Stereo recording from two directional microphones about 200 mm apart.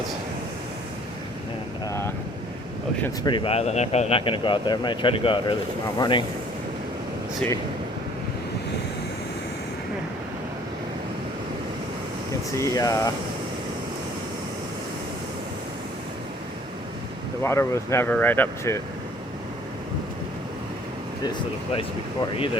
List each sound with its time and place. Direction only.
1.9 s vehicle: 15° left (ahead or behind)
3.2 s speech: 25° left (ahead or behind)
12.5 s speech: 15° left (ahead or behind)
17.4 s speech: 15° left (ahead or behind)